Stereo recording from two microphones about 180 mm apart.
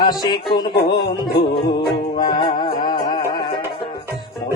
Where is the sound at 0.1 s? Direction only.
25° left (ahead or behind).